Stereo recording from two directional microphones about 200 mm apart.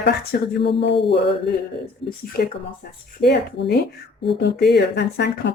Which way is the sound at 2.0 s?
50° left (ahead or behind).